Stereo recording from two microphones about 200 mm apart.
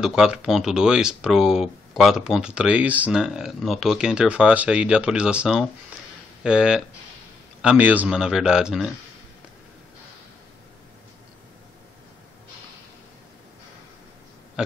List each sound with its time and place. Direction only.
0.0 s speech: 5° right (ahead or behind)